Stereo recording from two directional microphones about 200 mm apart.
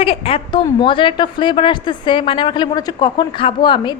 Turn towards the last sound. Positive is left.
turn(degrees=20)  # may be behind; listen again after turning